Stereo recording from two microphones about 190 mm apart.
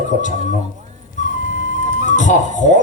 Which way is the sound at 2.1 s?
40° left (ahead or behind).